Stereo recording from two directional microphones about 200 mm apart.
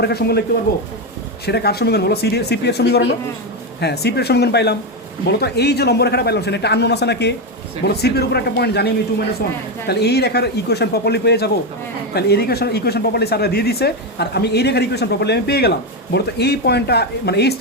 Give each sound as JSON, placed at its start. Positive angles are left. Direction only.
{"t": 0.0, "sound": "speech", "side_deg": 55}
{"t": 1.5, "sound": "a man's voice", "side_deg": 55}